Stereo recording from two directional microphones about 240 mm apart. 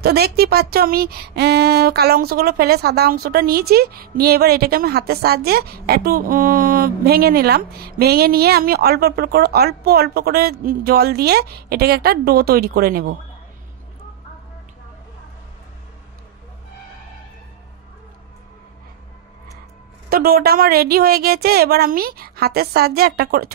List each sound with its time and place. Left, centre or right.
0.0 s speech: right
20.1 s speech: right